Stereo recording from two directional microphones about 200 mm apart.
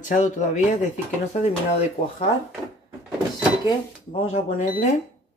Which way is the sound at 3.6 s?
30° left (ahead or behind).